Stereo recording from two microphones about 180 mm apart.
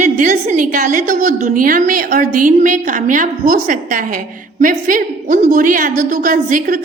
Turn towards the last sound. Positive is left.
turn(degrees=-45)  # may be behind; listen again after turning